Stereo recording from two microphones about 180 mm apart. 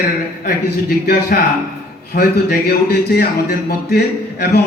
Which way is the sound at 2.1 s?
65° left (ahead or behind).